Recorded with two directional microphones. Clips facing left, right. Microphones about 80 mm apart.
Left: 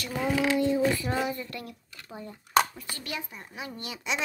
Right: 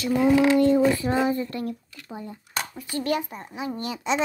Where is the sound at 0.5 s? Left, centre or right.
Right.